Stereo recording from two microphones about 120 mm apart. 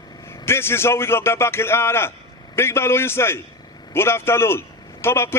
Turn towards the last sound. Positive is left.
turn(degrees=20)  # may be behind; listen again after turning